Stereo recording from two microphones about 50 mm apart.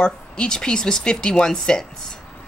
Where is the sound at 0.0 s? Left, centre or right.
Centre.